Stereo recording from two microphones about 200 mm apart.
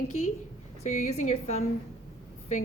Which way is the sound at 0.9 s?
40° left (ahead or behind).